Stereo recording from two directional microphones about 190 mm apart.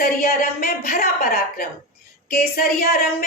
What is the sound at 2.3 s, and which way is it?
Speech, 55° left (ahead or behind).